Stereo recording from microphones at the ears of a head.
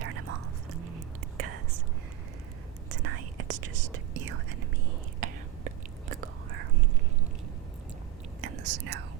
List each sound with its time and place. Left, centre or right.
0.0 s whispering: right
2.9 s whispering: right
8.4 s whispering: right